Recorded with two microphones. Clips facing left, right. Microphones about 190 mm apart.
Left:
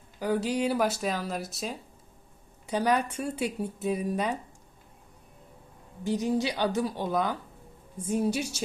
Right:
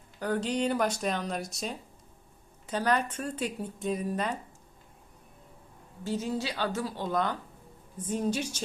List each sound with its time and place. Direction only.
0.2 s speech: 10° left (ahead or behind)
6.1 s speech: 15° left (ahead or behind)